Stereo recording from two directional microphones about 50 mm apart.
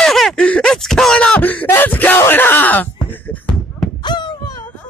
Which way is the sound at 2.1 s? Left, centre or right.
Left.